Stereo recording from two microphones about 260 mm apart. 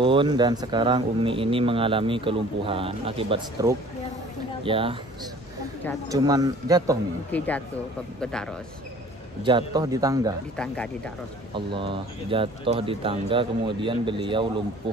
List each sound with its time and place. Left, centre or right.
0.0 s speech: centre
6.1 s a man's voice: centre
7.2 s speech: centre
9.4 s a man's voice: centre
10.5 s speech: centre
11.5 s speech: centre